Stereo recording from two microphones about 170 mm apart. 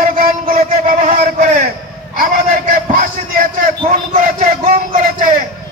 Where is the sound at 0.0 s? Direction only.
55° right (ahead or behind).